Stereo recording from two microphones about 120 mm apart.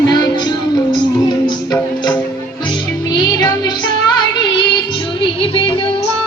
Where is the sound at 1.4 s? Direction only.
35° left (ahead or behind).